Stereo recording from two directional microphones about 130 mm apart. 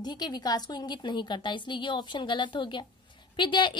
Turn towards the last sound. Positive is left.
turn(degrees=35)  # may be behind; listen again after turning